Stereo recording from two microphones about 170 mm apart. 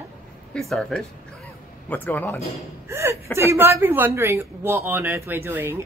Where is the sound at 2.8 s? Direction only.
15° right (ahead or behind).